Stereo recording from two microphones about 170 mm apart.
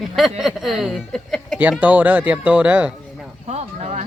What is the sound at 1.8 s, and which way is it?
Speech, 10° right (ahead or behind).